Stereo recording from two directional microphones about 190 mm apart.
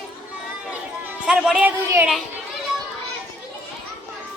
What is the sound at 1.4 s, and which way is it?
Speech, 5° right (ahead or behind).